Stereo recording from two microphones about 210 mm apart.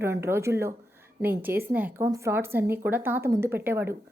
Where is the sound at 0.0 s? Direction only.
10° right (ahead or behind).